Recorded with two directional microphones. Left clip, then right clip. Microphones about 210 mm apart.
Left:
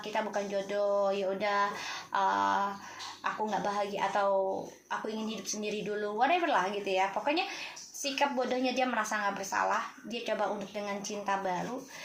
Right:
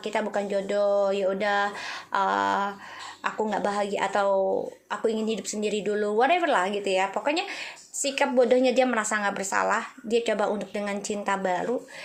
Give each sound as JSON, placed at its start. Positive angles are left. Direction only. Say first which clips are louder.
{"t": 0.0, "sound": "a woman's voice", "louder": "right 5 dB", "side_deg": -40}